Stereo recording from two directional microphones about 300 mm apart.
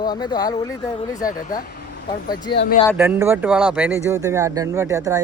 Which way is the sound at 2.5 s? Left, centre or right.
Left.